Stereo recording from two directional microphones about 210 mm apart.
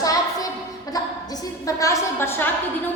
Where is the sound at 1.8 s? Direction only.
15° left (ahead or behind).